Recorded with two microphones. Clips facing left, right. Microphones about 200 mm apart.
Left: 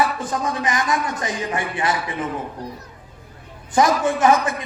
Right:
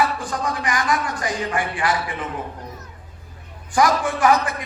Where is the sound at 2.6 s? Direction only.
35° left (ahead or behind).